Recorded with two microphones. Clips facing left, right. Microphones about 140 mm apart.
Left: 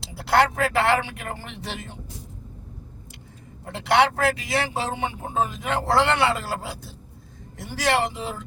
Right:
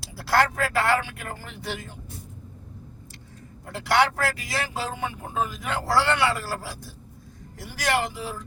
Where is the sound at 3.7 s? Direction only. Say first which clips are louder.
Left 2 dB; 25° left (ahead or behind).